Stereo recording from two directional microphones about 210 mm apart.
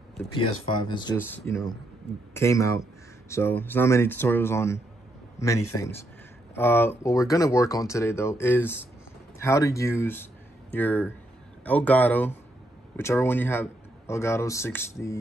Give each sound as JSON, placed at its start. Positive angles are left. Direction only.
{"t": 0.3, "sound": "speech", "side_deg": 20}
{"t": 1.1, "sound": "speech", "side_deg": 10}
{"t": 6.5, "sound": "speech", "side_deg": 10}